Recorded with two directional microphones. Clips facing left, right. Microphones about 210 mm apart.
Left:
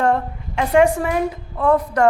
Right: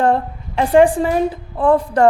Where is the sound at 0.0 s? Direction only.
30° right (ahead or behind).